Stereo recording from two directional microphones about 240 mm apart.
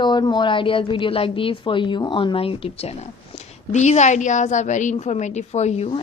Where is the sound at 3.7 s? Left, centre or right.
Left.